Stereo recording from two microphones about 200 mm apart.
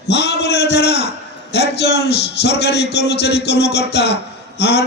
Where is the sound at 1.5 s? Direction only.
55° left (ahead or behind).